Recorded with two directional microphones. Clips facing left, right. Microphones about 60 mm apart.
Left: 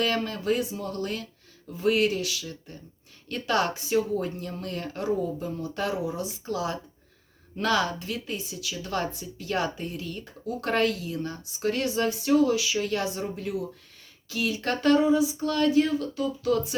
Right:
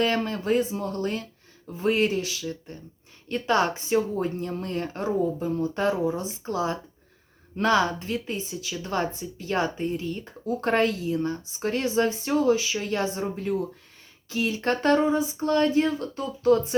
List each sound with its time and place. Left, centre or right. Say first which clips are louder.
0.0 s speech: right 2 dB; right